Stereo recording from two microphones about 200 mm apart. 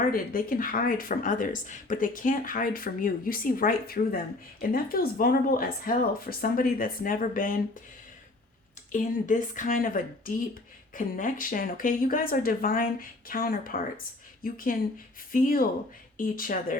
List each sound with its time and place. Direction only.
0.1 s speech: 45° left (ahead or behind)
8.9 s speech: 40° left (ahead or behind)